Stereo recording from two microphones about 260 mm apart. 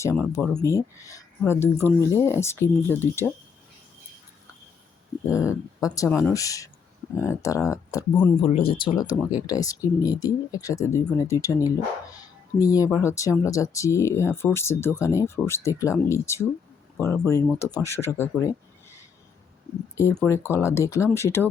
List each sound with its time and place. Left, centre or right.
0.0 s speech: centre
5.3 s speech: centre
8.4 s speech: left
20.0 s speech: centre